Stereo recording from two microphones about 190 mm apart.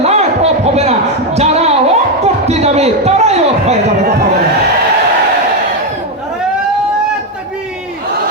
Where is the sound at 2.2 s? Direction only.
35° right (ahead or behind).